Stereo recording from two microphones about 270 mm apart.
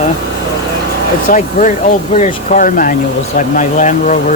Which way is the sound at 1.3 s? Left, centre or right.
Left.